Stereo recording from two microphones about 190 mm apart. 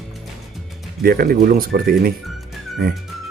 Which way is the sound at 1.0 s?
50° right (ahead or behind).